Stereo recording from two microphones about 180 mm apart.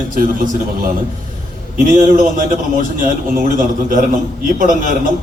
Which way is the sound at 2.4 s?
50° right (ahead or behind).